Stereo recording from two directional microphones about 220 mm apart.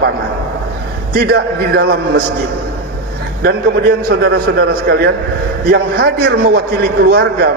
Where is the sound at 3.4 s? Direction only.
45° right (ahead or behind).